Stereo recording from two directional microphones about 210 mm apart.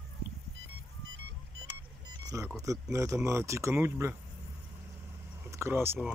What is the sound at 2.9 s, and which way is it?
Speech, 15° right (ahead or behind).